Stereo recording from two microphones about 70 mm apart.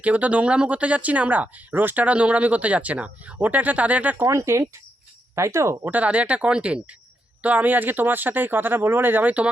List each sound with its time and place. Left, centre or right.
0.0 s speech: right
4.3 s speech: right
5.8 s speech: right